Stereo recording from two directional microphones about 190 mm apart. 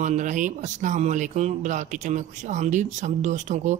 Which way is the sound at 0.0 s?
40° right (ahead or behind).